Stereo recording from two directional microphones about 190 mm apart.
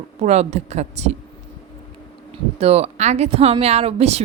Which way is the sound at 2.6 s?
35° right (ahead or behind).